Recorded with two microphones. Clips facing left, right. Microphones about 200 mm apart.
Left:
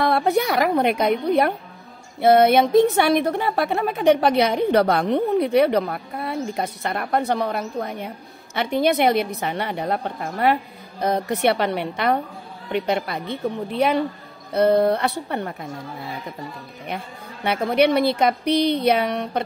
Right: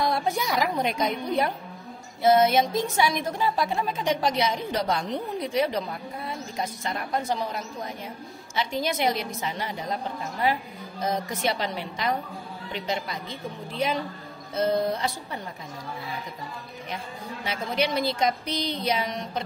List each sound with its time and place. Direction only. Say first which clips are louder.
0.0 s a woman's voice: left 7 dB; 65° left (ahead or behind)
16.8 s a woman's voice: left 5 dB; 60° left (ahead or behind)